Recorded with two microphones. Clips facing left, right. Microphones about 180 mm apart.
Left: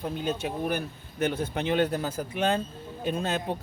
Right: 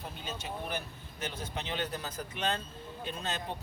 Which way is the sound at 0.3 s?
55° left (ahead or behind).